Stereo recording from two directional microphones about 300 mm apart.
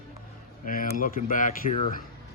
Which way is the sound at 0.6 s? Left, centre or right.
Left.